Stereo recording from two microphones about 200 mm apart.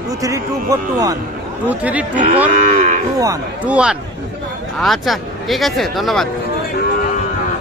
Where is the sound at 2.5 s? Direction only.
45° right (ahead or behind).